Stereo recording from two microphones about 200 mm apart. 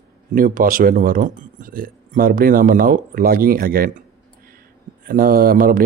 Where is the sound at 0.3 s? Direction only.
45° right (ahead or behind).